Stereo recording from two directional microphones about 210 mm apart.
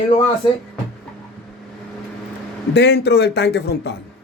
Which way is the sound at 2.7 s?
55° left (ahead or behind).